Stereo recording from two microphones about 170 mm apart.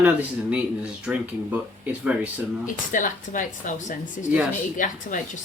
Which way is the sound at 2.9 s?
50° left (ahead or behind).